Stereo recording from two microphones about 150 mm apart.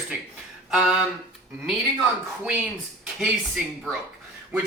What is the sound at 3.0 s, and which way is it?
Speech, centre (ahead or behind).